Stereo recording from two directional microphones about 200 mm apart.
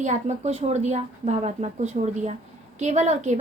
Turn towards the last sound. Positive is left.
turn(degrees=-35)  # may be behind; listen again after turning